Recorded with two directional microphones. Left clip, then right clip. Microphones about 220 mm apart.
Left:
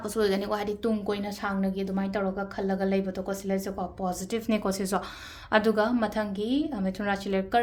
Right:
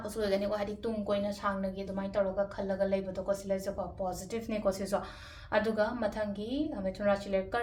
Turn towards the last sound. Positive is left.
turn(degrees=45)  # may be behind; listen again after turning